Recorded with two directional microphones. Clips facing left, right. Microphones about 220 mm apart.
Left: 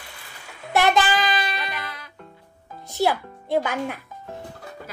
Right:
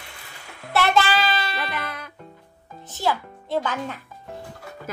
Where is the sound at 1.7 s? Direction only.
50° right (ahead or behind).